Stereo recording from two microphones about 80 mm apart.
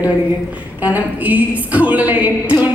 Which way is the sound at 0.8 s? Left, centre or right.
Centre.